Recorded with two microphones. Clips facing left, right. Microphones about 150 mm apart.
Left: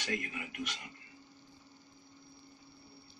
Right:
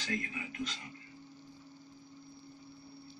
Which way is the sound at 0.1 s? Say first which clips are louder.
Even; 15° left (ahead or behind).